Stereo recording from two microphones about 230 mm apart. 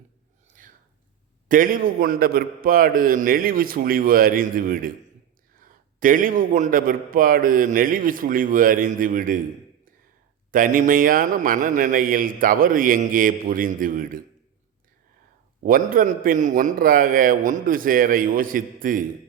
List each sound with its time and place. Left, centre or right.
1.5 s a man's voice: right
10.5 s a man's voice: right
15.6 s a man's voice: right